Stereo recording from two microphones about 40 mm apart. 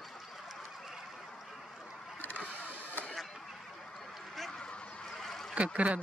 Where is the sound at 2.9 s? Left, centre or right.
Left.